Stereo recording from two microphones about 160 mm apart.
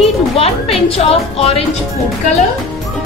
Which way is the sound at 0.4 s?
40° left (ahead or behind).